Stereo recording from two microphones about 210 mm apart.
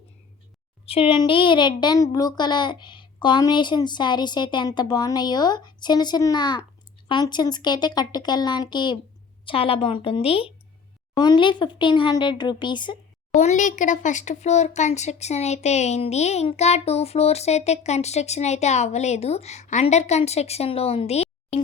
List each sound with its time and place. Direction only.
0.9 s a woman's voice: 25° left (ahead or behind)
13.3 s speech: 35° left (ahead or behind)